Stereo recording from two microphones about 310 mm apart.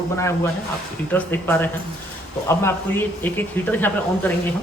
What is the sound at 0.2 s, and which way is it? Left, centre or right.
A man's voice, centre.